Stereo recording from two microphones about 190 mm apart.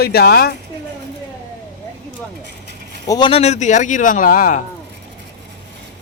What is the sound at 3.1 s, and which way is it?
Speech, 25° left (ahead or behind).